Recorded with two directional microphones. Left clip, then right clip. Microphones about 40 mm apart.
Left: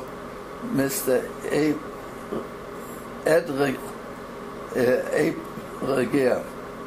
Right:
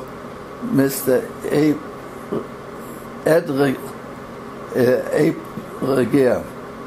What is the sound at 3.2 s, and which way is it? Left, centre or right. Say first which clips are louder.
Speech: right 4 dB; right.